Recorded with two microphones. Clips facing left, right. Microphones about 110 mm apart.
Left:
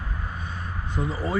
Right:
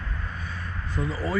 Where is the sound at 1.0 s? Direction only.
20° left (ahead or behind).